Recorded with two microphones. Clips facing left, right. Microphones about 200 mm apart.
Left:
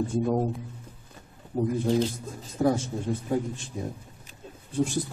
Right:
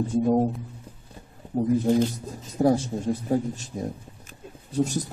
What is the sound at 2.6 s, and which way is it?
Speech, 35° right (ahead or behind).